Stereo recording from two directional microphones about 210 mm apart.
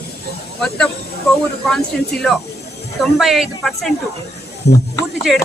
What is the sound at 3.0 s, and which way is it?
Speech, centre (ahead or behind).